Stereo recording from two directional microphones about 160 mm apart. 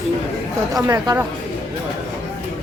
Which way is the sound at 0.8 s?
25° right (ahead or behind).